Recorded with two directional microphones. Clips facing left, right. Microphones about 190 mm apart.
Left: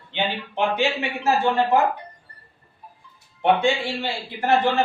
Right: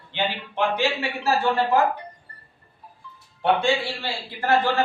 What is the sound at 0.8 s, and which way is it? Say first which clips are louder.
Speech: left 1 dB; 20° left (ahead or behind).